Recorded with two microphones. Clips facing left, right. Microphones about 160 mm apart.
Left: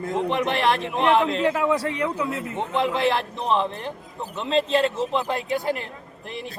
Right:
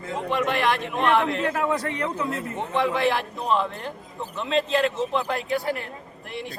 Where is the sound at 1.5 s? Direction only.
10° left (ahead or behind).